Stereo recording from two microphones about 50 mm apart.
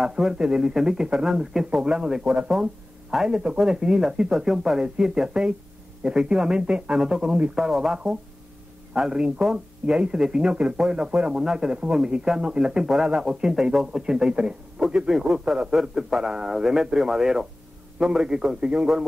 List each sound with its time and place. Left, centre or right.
0.0 s speech: centre